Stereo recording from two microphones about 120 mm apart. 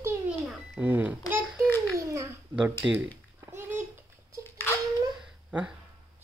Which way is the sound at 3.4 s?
20° right (ahead or behind).